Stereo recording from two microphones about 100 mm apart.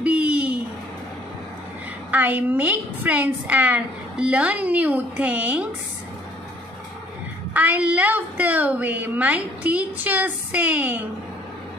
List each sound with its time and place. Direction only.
0.0 s a sound: 10° right (ahead or behind)
2.0 s a woman's voice: 15° right (ahead or behind)
7.5 s a woman's voice: 15° right (ahead or behind)